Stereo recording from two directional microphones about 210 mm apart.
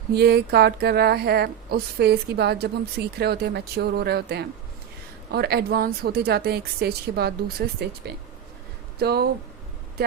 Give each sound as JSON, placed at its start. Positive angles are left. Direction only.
{"t": 0.1, "sound": "speech", "side_deg": -50}